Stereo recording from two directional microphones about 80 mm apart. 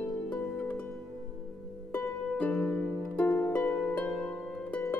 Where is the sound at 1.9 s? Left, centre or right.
Left.